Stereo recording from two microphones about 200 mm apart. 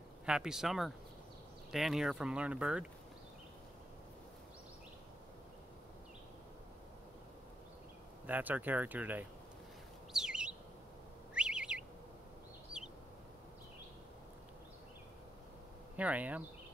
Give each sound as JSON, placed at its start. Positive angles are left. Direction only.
{"t": 0.2, "sound": "speech", "side_deg": -5}
{"t": 8.3, "sound": "speech", "side_deg": -10}
{"t": 10.1, "sound": "chirp", "side_deg": -5}
{"t": 11.3, "sound": "bird", "side_deg": -5}
{"t": 16.0, "sound": "speech", "side_deg": -5}